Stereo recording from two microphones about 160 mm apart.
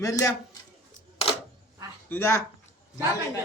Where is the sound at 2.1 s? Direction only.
15° left (ahead or behind).